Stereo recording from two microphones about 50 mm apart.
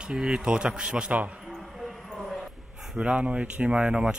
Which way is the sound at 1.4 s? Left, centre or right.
Centre.